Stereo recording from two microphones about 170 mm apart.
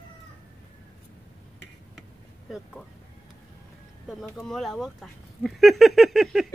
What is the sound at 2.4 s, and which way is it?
Speech, centre (ahead or behind).